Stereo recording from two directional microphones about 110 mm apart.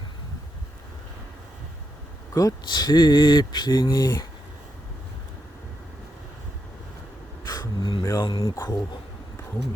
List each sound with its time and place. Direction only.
2.3 s speech: 30° left (ahead or behind)
7.4 s a sound: 40° left (ahead or behind)
8.1 s speech: 45° left (ahead or behind)